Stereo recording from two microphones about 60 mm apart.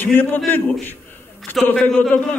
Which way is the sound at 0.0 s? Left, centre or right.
Left.